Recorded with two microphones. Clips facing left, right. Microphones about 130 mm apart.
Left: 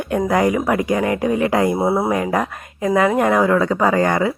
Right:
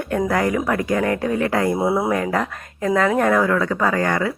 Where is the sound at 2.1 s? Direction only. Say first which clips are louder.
Left 2 dB; 15° left (ahead or behind).